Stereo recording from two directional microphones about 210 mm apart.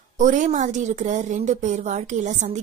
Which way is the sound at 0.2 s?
35° right (ahead or behind).